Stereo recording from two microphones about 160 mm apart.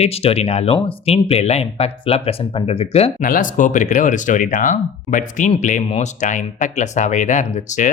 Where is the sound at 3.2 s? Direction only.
60° left (ahead or behind).